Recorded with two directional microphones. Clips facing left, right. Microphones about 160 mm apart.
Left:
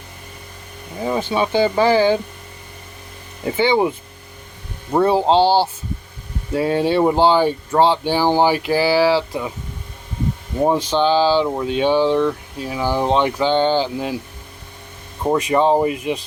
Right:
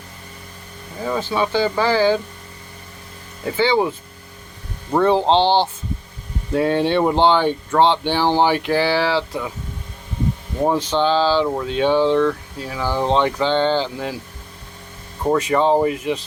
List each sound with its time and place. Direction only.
1.0 s speech: 20° left (ahead or behind)
3.4 s speech: 15° left (ahead or behind)
10.6 s speech: 10° left (ahead or behind)
15.2 s speech: 15° left (ahead or behind)